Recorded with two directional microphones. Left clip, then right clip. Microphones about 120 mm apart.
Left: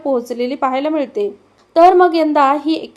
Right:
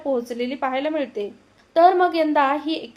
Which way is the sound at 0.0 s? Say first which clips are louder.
Left 6 dB; 40° left (ahead or behind).